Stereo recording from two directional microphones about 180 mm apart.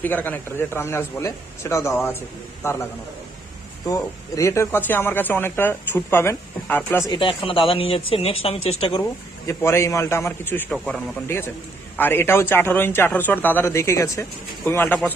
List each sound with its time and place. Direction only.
0.0 s a man's voice: 10° left (ahead or behind)
3.8 s a man's voice: 20° left (ahead or behind)
7.1 s speech: 30° left (ahead or behind)
9.5 s a man's voice: 15° left (ahead or behind)